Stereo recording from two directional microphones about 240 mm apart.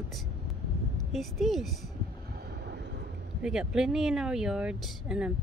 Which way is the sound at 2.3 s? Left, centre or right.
Right.